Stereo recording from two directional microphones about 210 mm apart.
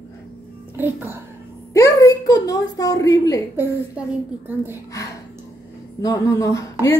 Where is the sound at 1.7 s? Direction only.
15° left (ahead or behind).